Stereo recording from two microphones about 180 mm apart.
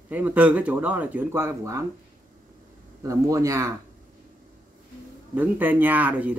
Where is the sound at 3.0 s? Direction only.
20° right (ahead or behind).